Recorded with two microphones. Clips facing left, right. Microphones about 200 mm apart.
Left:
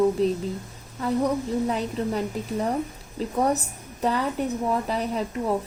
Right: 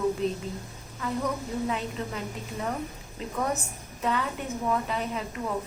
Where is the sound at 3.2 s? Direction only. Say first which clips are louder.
Left 6 dB; 35° left (ahead or behind).